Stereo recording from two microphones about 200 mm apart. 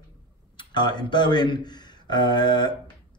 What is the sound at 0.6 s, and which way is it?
A man's voice, 20° left (ahead or behind).